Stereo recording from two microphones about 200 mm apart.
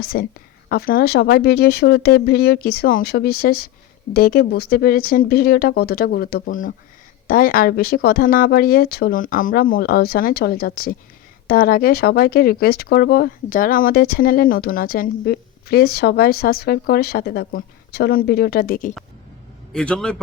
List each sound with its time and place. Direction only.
0.0 s speech: 50° left (ahead or behind)
19.7 s a man's voice: 5° left (ahead or behind)